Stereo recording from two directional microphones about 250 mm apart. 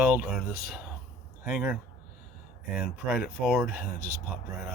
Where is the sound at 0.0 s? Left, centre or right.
Centre.